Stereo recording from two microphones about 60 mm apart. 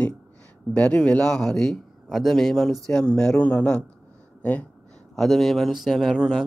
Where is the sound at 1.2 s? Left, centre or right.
Centre; by 4.6 s left.